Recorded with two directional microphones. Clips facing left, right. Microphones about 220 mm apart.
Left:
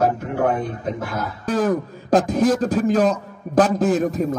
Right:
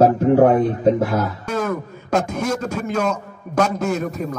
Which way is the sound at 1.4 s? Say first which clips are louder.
Left 3 dB; 35° left (ahead or behind).